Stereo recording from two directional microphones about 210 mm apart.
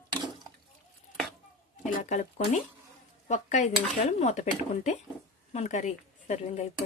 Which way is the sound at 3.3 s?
35° left (ahead or behind).